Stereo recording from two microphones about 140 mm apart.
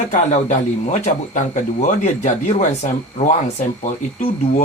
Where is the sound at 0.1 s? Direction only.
55° left (ahead or behind).